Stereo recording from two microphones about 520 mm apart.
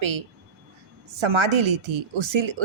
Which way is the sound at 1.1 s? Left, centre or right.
Right.